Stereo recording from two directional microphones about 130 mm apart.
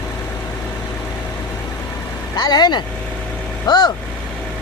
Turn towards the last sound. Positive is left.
turn(degrees=30)  # may be behind; listen again after turning